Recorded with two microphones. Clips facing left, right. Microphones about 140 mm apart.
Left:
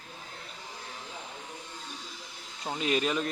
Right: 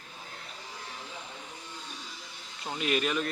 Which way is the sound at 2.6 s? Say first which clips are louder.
Left 1 dB; 30° left (ahead or behind).